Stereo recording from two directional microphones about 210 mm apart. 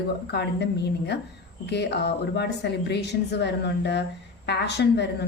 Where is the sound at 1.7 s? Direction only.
50° left (ahead or behind).